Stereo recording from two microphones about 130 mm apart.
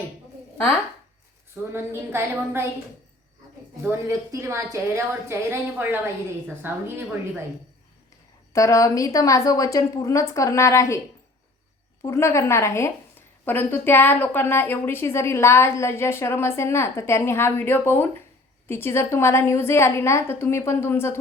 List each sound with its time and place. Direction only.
1.7 s a woman's voice: 20° right (ahead or behind)
3.8 s a woman's voice: 25° right (ahead or behind)
8.5 s a woman's voice: 25° left (ahead or behind)
12.0 s a woman's voice: 20° left (ahead or behind)